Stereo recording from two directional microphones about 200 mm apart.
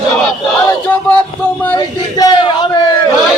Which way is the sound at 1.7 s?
20° left (ahead or behind).